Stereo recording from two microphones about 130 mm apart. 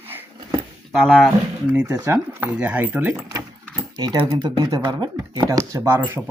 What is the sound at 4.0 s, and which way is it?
Speech, 35° right (ahead or behind).